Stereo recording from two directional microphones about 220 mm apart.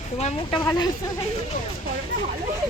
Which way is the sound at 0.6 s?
15° left (ahead or behind).